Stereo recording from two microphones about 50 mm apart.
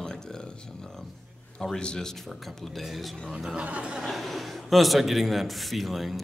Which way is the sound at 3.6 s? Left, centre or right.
Right.